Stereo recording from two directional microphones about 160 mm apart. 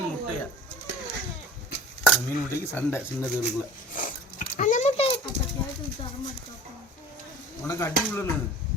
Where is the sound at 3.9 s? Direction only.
55° left (ahead or behind); by 5.3 s 35° left (ahead or behind).